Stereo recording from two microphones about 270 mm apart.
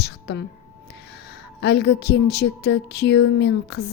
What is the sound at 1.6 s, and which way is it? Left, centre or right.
Speech, left.